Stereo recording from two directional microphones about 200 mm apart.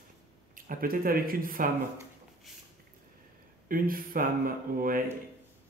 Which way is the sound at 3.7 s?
45° right (ahead or behind).